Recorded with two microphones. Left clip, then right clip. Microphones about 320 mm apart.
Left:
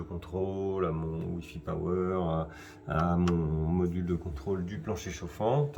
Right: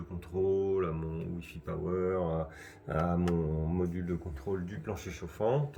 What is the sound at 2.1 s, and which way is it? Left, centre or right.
Speech, left.